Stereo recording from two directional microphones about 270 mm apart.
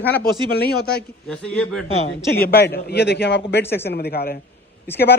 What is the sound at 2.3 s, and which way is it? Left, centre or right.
A man's voice, left.